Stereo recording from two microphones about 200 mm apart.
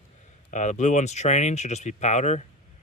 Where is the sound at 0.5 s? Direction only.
35° left (ahead or behind).